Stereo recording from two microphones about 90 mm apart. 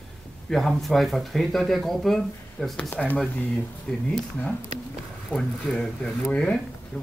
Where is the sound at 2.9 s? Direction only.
20° left (ahead or behind).